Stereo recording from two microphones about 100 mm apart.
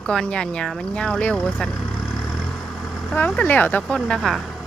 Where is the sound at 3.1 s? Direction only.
15° left (ahead or behind).